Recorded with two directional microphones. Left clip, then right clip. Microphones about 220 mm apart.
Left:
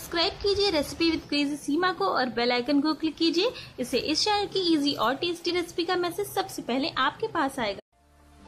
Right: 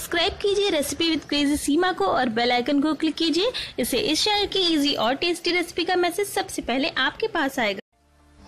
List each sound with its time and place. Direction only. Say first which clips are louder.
0.1 s speech: right 4 dB; 25° right (ahead or behind)